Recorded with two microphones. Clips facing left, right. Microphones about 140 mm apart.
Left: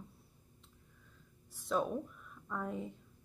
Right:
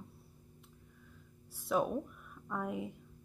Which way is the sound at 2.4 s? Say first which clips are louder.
Right 2 dB; 10° right (ahead or behind).